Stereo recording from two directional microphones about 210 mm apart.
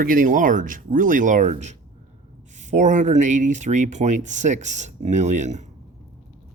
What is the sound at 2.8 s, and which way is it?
Speech, 35° right (ahead or behind).